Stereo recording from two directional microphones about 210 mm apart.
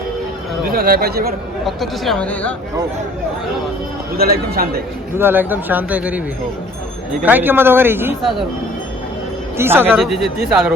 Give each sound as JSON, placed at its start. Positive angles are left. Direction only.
{"t": 0.6, "sound": "speech", "side_deg": -45}
{"t": 1.6, "sound": "speech", "side_deg": 0}
{"t": 4.2, "sound": "speech", "side_deg": -45}
{"t": 5.1, "sound": "speech", "side_deg": -10}
{"t": 9.6, "sound": "speech", "side_deg": -10}
{"t": 10.0, "sound": "speech", "side_deg": 0}